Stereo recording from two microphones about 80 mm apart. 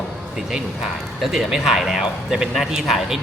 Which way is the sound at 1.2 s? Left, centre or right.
Centre.